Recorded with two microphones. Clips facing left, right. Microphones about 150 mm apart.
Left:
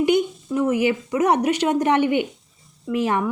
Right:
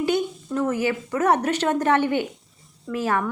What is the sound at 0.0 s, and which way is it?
A woman's voice, 15° left (ahead or behind).